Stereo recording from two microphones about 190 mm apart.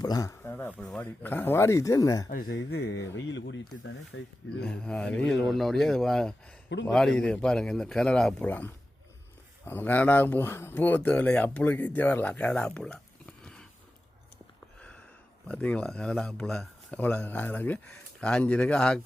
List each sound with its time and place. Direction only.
0.0 s speech: 20° left (ahead or behind)
2.3 s speech: 50° left (ahead or behind)
2.6 s speech: 60° left (ahead or behind)
4.1 s speech: 90° left
4.6 s speech: 5° left (ahead or behind)
15.4 s speech: 5° left (ahead or behind)